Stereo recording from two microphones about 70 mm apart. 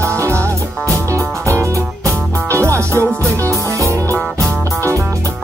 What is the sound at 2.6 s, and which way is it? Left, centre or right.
Music, right.